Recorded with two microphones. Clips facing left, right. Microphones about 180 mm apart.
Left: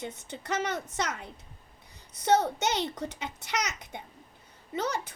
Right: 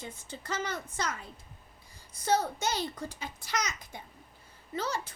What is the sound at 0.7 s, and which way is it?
Speech, 75° left (ahead or behind).